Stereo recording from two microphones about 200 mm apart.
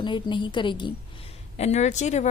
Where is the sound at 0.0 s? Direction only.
25° left (ahead or behind).